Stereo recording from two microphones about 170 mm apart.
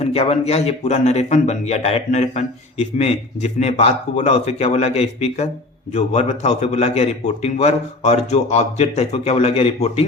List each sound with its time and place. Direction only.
0.0 s speech: 35° left (ahead or behind)